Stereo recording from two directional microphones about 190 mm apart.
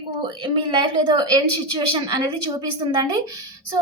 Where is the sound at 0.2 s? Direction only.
25° right (ahead or behind).